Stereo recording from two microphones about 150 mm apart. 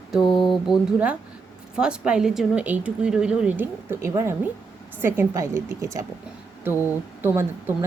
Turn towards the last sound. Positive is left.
turn(degrees=-15)  # may be behind; listen again after turning